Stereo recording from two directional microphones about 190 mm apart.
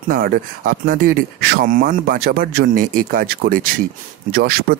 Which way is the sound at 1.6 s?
45° right (ahead or behind).